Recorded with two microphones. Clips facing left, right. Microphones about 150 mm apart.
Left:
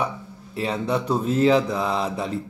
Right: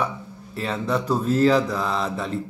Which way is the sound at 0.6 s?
30° left (ahead or behind).